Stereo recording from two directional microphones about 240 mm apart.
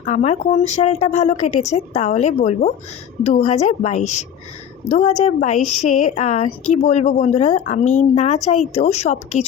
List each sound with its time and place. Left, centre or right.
0.0 s a woman's voice: left